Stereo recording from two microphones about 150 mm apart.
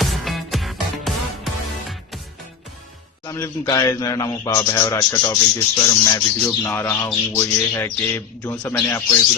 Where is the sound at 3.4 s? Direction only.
25° left (ahead or behind).